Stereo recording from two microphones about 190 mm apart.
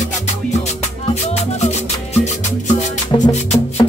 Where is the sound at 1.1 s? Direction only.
35° left (ahead or behind).